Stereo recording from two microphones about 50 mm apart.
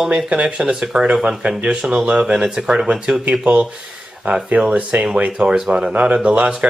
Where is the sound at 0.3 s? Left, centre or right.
Right.